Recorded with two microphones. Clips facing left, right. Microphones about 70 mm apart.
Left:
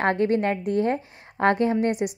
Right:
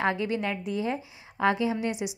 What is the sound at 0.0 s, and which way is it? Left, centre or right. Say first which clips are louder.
A woman's voice: left 6 dB; left.